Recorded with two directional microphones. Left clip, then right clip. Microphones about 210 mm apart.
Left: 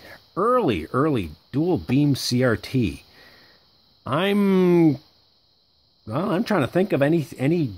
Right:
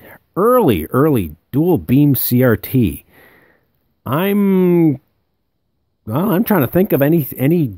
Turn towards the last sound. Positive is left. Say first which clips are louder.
# right 6 dB
turn(degrees=-35)  # may be behind; listen again after turning